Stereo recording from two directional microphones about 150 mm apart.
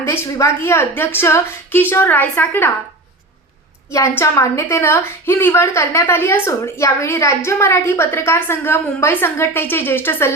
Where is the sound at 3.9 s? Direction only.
20° left (ahead or behind).